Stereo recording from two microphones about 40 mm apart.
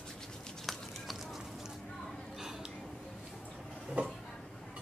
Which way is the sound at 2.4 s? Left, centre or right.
Centre.